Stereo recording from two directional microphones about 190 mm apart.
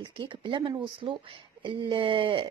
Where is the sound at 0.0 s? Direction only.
25° right (ahead or behind).